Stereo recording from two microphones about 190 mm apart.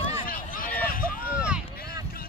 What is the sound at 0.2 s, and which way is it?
Run, 45° left (ahead or behind).